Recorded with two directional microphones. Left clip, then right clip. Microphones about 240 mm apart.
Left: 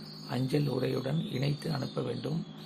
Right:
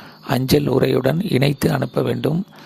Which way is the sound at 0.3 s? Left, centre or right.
Right.